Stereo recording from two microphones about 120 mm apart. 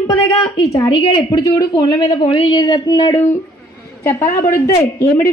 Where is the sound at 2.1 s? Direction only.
50° left (ahead or behind).